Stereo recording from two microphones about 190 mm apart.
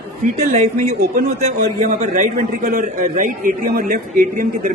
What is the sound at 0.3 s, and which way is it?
A man's voice, 40° right (ahead or behind).